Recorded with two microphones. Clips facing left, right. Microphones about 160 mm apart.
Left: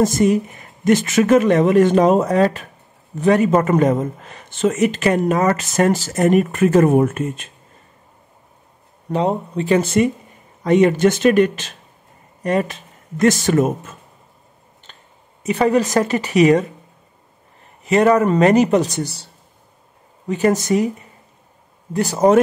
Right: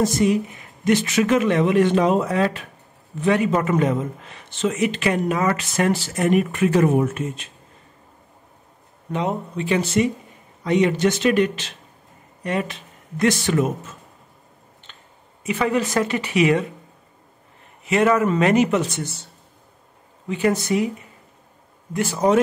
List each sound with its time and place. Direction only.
0.0 s speech: 45° left (ahead or behind)
9.1 s speech: 35° left (ahead or behind)
15.4 s speech: 40° left (ahead or behind)
17.8 s speech: 40° left (ahead or behind)
20.2 s speech: 40° left (ahead or behind)
21.9 s speech: 40° left (ahead or behind)